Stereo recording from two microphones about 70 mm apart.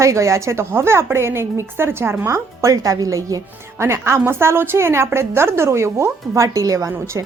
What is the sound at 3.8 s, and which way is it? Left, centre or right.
Speech, right.